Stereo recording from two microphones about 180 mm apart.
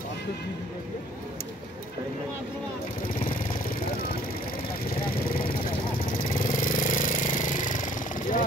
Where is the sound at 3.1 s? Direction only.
50° left (ahead or behind).